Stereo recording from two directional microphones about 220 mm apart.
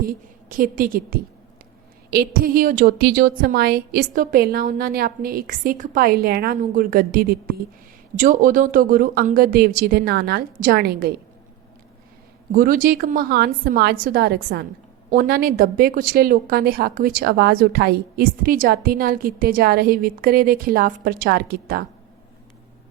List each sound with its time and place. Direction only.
0.0 s a woman's voice: 40° right (ahead or behind)
12.5 s a woman's voice: 40° right (ahead or behind)